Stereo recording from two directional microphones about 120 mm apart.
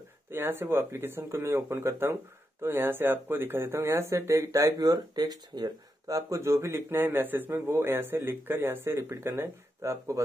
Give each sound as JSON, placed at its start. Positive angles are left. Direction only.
{"t": 0.3, "sound": "speech", "side_deg": -20}